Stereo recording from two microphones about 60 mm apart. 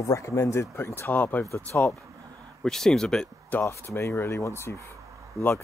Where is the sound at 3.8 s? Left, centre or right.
Left.